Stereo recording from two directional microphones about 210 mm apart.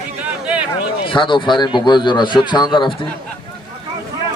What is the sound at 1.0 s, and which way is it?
Speech, 25° left (ahead or behind).